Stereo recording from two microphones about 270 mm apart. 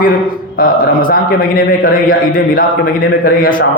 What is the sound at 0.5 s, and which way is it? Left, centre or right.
A man's voice, left.